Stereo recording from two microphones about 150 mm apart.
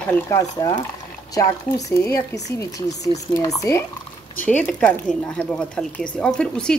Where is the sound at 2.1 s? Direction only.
20° left (ahead or behind).